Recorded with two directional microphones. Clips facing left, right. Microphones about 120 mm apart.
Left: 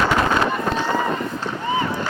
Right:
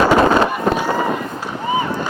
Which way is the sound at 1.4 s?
15° right (ahead or behind).